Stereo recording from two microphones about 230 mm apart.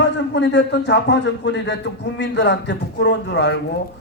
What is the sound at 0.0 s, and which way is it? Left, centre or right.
A man's voice, left.